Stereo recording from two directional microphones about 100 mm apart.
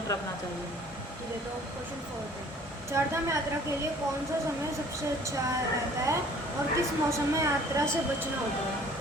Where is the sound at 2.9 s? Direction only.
30° right (ahead or behind).